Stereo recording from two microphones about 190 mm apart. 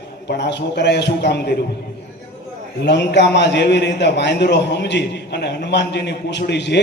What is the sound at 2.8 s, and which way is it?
A man's voice, 65° left (ahead or behind).